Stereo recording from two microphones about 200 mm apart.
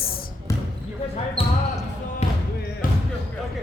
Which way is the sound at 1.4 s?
30° left (ahead or behind).